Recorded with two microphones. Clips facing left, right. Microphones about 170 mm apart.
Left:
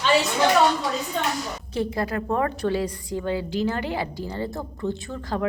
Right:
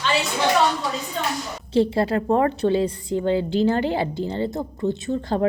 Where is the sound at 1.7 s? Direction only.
30° right (ahead or behind).